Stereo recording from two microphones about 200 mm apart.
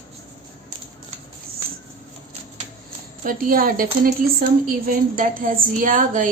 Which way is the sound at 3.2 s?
45° right (ahead or behind).